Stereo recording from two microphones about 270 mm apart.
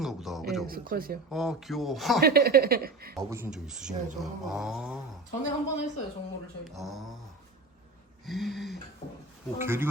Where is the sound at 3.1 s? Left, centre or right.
Centre.